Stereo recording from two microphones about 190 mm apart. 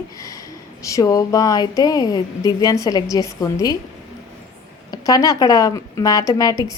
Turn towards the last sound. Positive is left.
turn(degrees=20)  # may be behind; listen again after turning